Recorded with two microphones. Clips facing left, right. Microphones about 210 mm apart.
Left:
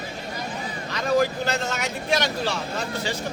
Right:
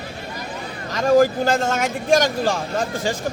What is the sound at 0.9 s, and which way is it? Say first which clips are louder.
Speech: right 7 dB; 45° right (ahead or behind).